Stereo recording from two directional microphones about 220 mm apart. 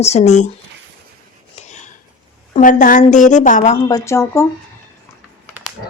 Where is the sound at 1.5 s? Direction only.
30° left (ahead or behind).